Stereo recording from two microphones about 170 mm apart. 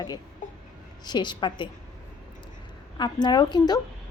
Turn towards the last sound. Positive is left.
turn(degrees=25)  # may be behind; listen again after turning